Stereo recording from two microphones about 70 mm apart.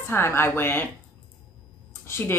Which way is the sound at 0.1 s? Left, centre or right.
Left.